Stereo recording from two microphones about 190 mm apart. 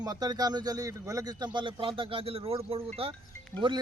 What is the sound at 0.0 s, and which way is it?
A man's voice, 20° right (ahead or behind).